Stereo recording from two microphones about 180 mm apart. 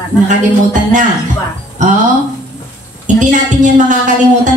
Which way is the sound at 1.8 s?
45° right (ahead or behind).